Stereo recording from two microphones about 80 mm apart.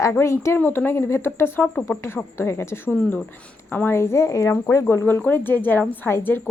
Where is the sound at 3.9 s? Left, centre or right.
Left.